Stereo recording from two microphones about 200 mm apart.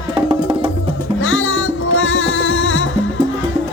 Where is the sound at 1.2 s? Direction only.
80° left.